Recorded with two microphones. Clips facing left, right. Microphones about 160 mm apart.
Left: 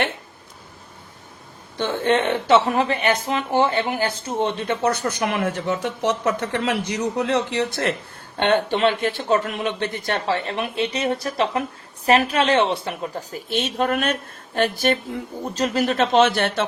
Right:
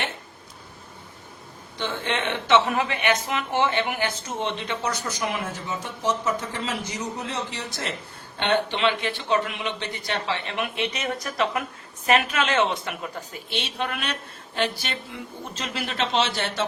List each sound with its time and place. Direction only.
1.8 s a woman's voice: 45° left (ahead or behind)
4.6 s speech: 50° left (ahead or behind)
8.4 s a man's voice: 50° left (ahead or behind)